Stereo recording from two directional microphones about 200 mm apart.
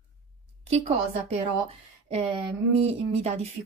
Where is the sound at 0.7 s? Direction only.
30° right (ahead or behind).